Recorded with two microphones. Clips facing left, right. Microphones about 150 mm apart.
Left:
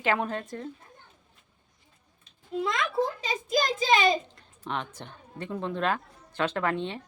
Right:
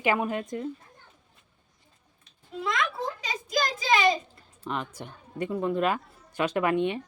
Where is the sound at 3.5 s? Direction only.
25° left (ahead or behind).